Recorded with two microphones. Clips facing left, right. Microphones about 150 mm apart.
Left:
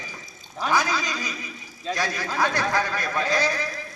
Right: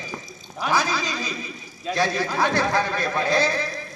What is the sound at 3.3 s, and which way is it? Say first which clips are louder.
Speech: right 3 dB; 15° left (ahead or behind).